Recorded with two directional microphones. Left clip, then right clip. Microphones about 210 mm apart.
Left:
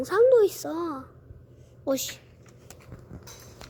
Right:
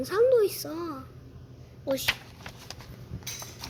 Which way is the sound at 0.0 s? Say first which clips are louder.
Left 3 dB; 20° left (ahead or behind).